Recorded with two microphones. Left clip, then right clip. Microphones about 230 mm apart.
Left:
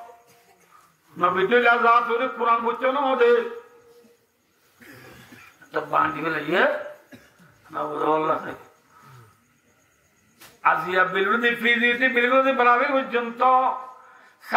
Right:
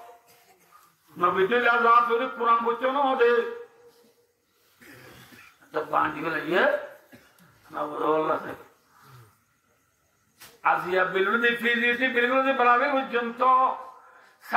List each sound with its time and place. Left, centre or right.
1.1 s a man's voice: left
4.7 s a sound: left
5.7 s a man's voice: left
7.7 s a man's voice: left
10.6 s a man's voice: left